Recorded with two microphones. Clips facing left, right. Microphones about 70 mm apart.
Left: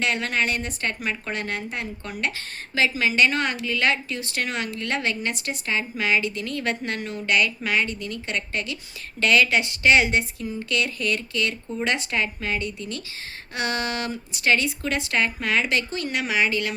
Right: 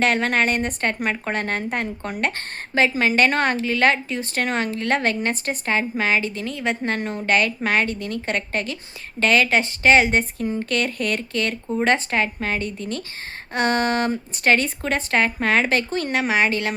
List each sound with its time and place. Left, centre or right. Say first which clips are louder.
0.0 s a woman's voice: right 5 dB; right
6.5 s a woman's voice: right 3 dB; centre
6.8 s a woman's voice: right 4 dB; right